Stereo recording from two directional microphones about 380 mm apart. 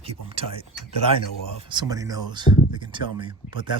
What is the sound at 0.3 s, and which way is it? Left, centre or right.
Speech, centre.